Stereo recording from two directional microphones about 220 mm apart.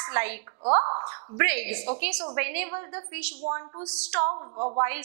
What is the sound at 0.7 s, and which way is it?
A woman's voice, 30° right (ahead or behind).